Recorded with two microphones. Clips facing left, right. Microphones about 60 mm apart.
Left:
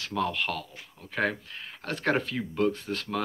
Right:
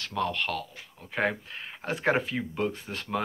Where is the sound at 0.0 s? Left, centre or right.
Centre.